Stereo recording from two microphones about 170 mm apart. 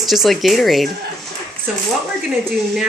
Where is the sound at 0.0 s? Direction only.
Centre (ahead or behind).